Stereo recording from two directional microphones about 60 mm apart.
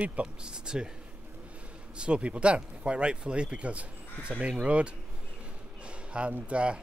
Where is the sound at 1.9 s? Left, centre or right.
Centre.